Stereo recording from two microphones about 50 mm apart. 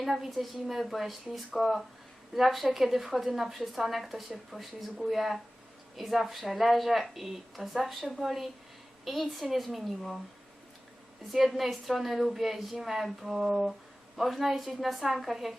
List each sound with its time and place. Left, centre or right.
0.0 s a woman's voice: centre
11.3 s a woman's voice: centre